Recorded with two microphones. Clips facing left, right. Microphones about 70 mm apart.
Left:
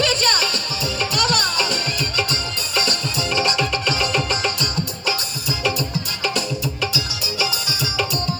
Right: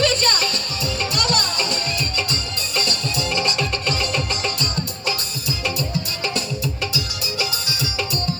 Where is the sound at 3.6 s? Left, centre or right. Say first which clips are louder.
Left 2 dB; right.